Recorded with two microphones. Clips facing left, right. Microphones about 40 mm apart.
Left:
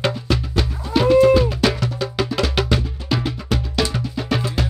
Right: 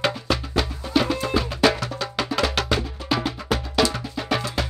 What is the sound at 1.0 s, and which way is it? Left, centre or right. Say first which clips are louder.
Music: left 13 dB; centre.